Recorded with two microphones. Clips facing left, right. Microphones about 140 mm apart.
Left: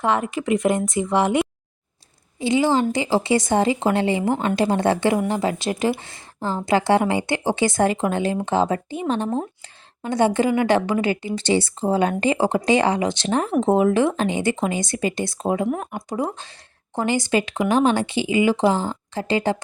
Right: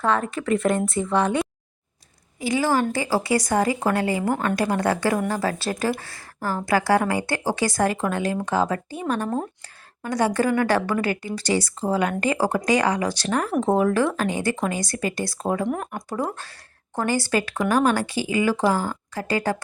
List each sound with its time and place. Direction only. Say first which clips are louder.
0.0 s speech: left 1 dB; 20° left (ahead or behind)
15.6 s speech: left 2 dB; 5° left (ahead or behind)
16.0 s speech: left 2 dB; 20° left (ahead or behind)